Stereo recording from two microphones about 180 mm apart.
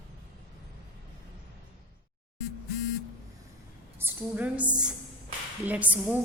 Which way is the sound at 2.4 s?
65° left (ahead or behind).